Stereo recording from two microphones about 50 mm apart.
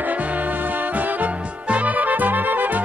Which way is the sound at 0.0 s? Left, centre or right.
Right.